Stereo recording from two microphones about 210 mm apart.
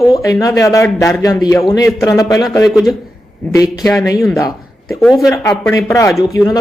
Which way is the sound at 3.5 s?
15° left (ahead or behind).